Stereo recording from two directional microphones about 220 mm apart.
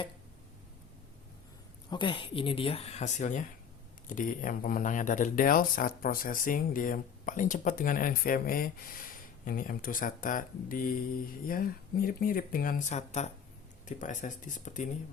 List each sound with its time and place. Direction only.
1.9 s speech: 20° left (ahead or behind)